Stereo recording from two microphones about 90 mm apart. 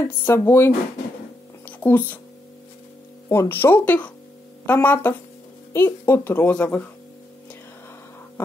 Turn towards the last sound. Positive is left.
turn(degrees=15)  # may be behind; listen again after turning